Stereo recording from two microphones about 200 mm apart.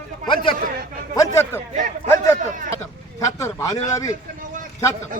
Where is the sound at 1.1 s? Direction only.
15° left (ahead or behind).